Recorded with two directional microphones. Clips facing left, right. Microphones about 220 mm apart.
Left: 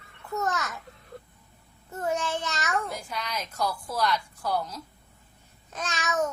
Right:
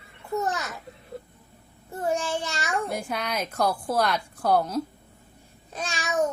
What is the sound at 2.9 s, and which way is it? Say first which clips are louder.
A woman's voice: right 5 dB; 55° right (ahead or behind).